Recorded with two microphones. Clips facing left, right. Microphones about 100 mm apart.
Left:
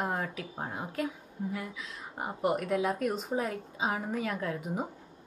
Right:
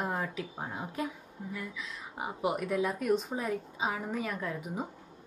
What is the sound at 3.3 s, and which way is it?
Speech, 25° left (ahead or behind).